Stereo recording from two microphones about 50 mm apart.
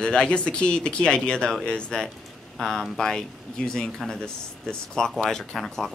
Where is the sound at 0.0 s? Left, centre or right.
Centre.